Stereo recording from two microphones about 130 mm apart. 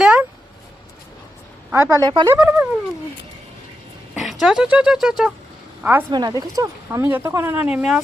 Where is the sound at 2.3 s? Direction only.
15° right (ahead or behind).